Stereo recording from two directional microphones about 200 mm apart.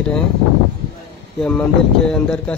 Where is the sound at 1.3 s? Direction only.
5° left (ahead or behind).